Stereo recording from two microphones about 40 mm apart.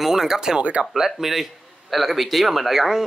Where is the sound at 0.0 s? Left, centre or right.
Centre.